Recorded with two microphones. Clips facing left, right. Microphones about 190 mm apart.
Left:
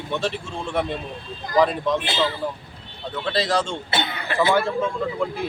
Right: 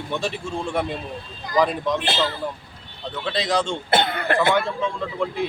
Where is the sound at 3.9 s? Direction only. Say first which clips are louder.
Right 6 dB; 55° right (ahead or behind).